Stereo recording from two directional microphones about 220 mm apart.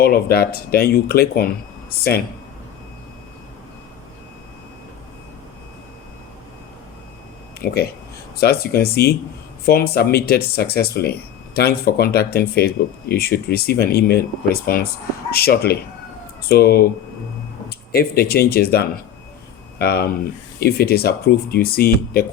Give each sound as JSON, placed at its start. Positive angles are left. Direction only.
{"t": 0.0, "sound": "speech", "side_deg": 45}
{"t": 7.6, "sound": "speech", "side_deg": 45}